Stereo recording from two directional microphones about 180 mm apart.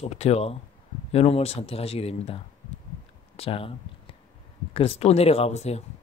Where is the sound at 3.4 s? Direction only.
30° left (ahead or behind).